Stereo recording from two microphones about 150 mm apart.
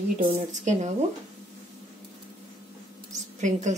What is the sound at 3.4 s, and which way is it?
Speech, 55° right (ahead or behind).